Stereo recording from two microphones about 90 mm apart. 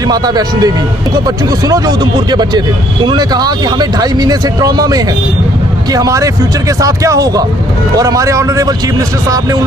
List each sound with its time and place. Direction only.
0.1 s speech: 45° right (ahead or behind)